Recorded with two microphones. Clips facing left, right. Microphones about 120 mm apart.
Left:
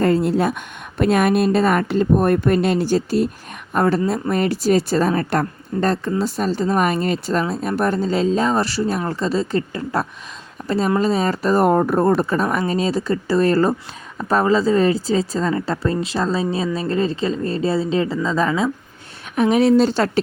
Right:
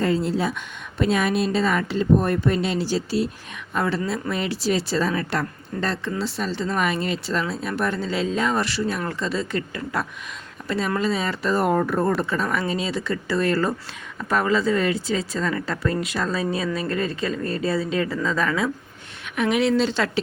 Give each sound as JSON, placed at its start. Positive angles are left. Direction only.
{"t": 0.0, "sound": "a woman's voice", "side_deg": 55}
{"t": 19.4, "sound": "speech", "side_deg": 35}